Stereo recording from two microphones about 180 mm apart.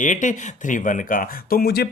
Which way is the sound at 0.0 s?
45° left (ahead or behind).